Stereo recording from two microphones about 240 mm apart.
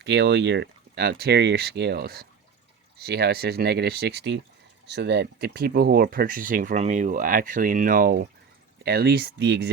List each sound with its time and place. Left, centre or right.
0.0 s speech: right